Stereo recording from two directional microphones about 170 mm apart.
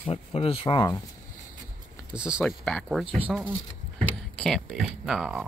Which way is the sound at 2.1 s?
5° right (ahead or behind).